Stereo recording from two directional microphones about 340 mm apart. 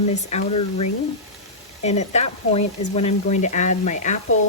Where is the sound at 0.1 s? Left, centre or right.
Centre.